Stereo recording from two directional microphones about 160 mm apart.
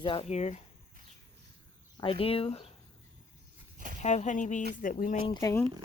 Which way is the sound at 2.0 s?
35° left (ahead or behind).